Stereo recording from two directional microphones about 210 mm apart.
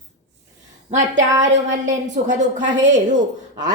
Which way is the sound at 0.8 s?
35° right (ahead or behind).